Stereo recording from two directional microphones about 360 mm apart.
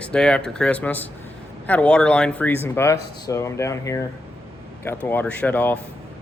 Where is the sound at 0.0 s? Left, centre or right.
Centre.